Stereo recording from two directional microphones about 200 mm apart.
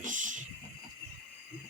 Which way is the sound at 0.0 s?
40° right (ahead or behind).